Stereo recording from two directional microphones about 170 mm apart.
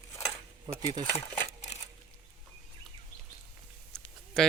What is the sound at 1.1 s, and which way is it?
Cutlery, 35° left (ahead or behind).